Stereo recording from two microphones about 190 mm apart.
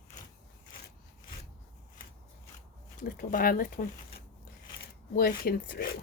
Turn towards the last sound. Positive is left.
turn(degrees=50)  # may be behind; listen again after turning